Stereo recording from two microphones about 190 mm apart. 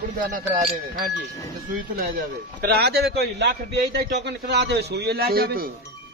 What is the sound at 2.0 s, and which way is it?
A man's voice, 50° right (ahead or behind).